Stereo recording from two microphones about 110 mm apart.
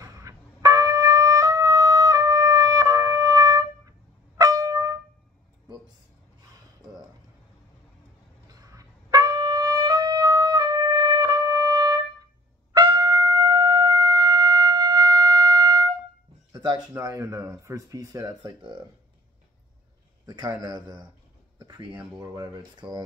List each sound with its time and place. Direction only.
0.0 s trumpet: 30° right (ahead or behind)
8.5 s trumpet: 35° right (ahead or behind)
16.5 s speech: 40° right (ahead or behind)
20.2 s speech: 40° right (ahead or behind)